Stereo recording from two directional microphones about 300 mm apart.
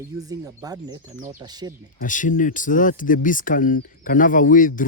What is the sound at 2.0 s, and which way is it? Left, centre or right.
Speech, left.